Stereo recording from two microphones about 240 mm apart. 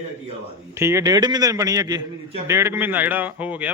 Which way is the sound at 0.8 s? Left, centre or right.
Centre.